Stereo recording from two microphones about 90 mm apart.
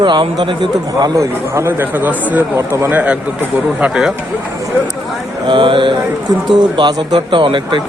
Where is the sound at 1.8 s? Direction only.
20° right (ahead or behind).